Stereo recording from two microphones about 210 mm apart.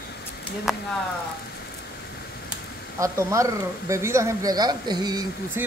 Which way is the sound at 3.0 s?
15° right (ahead or behind).